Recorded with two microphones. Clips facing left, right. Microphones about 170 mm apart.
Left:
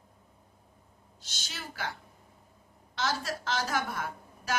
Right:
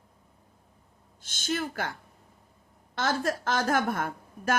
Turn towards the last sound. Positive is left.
turn(degrees=-50)  # may be behind; listen again after turning